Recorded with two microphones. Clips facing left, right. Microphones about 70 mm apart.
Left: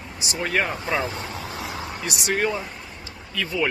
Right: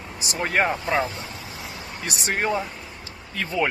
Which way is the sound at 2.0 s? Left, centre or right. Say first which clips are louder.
Left 1 dB; right.